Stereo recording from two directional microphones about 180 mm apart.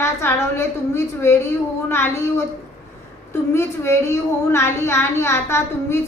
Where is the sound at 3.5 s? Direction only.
15° left (ahead or behind).